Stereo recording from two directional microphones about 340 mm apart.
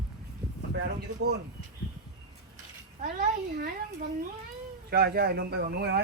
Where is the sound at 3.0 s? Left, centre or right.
Right.